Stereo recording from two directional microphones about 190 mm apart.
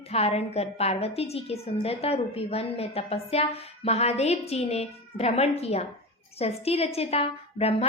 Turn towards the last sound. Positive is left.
turn(degrees=30)  # may be behind; listen again after turning